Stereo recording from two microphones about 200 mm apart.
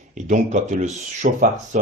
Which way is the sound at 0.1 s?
35° right (ahead or behind).